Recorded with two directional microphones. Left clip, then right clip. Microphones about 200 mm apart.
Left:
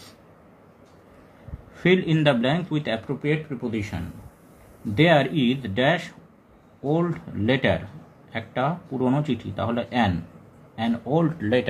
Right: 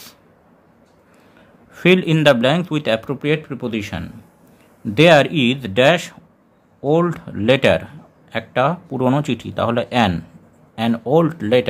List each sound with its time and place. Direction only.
1.7 s a man's voice: 40° right (ahead or behind)